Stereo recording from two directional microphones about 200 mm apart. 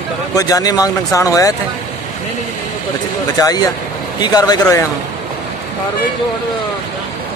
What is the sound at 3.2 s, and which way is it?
A man's voice, 20° left (ahead or behind).